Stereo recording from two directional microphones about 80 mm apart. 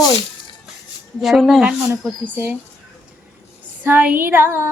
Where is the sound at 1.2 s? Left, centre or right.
Centre.